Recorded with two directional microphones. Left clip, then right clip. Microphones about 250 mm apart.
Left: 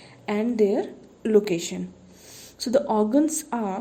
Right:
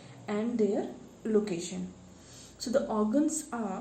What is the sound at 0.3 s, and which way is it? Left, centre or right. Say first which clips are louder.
A woman's voice: left 8 dB; left.